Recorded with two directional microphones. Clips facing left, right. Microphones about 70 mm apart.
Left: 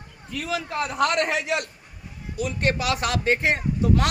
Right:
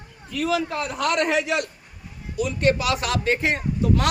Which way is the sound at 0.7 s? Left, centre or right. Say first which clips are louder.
Left 2 dB; left.